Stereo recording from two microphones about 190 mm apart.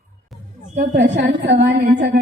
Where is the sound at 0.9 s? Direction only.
65° right (ahead or behind).